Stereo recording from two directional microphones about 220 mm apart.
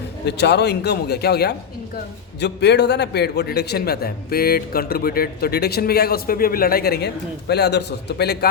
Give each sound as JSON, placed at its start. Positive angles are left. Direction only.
{"t": 0.3, "sound": "a man's voice", "side_deg": 50}